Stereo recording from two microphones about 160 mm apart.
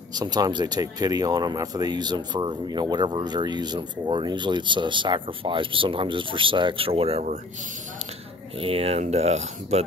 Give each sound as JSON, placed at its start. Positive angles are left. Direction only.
{"t": 0.1, "sound": "speech", "side_deg": -25}
{"t": 8.5, "sound": "speech", "side_deg": -35}